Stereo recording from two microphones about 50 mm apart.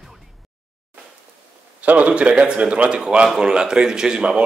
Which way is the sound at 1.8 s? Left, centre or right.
Right.